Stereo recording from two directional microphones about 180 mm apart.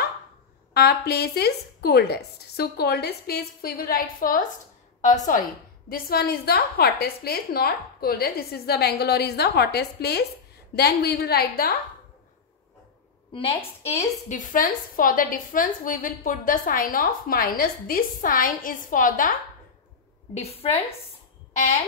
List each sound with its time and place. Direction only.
0.7 s a woman's voice: 65° left (ahead or behind); by 5.4 s 45° left (ahead or behind)
5.9 s a woman's voice: 55° left (ahead or behind)
13.3 s a woman's voice: 30° left (ahead or behind); by 19.3 s 50° left (ahead or behind)
20.3 s a woman's voice: 35° left (ahead or behind)